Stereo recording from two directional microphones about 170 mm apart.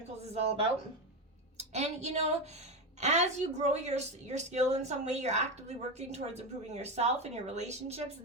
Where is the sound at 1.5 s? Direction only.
40° right (ahead or behind).